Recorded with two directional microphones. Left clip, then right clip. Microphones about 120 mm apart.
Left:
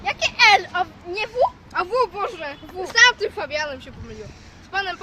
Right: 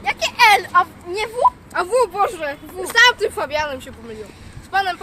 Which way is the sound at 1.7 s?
15° right (ahead or behind).